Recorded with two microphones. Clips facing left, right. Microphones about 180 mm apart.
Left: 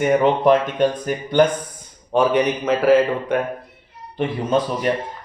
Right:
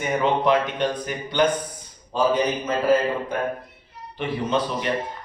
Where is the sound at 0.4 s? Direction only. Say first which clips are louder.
Left 5 dB; 45° left (ahead or behind).